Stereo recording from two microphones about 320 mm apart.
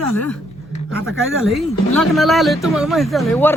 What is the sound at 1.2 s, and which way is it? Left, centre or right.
Speech, right.